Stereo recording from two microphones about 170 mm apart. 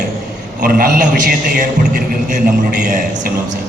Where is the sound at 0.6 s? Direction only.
55° right (ahead or behind).